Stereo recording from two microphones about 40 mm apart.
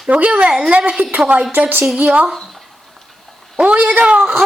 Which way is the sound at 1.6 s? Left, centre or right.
Right.